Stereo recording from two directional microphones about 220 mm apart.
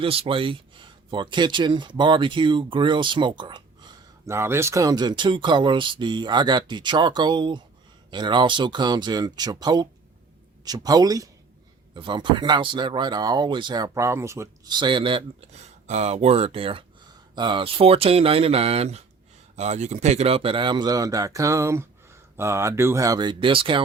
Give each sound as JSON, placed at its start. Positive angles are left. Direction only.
{"t": 0.0, "sound": "speech", "side_deg": -25}